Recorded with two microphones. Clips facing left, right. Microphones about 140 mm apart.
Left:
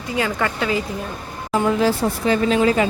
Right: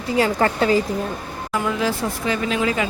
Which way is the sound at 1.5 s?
35° left (ahead or behind).